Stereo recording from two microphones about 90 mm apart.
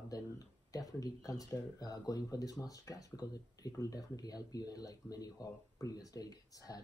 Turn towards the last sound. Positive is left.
turn(degrees=45)  # may be behind; listen again after turning